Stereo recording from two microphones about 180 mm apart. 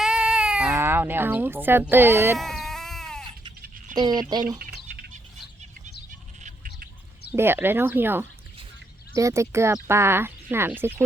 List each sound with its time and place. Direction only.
0.0 s baby cry: 5° right (ahead or behind)
2.4 s sheep: centre (ahead or behind)
3.9 s speech: 25° right (ahead or behind)
6.4 s squawk: 50° right (ahead or behind)
7.3 s speech: 10° right (ahead or behind)